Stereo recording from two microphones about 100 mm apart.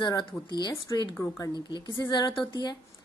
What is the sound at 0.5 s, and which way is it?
A woman's voice, 50° left (ahead or behind).